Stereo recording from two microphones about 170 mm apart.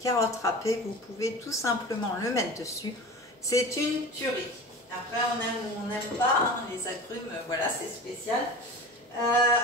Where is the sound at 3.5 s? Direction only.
20° left (ahead or behind).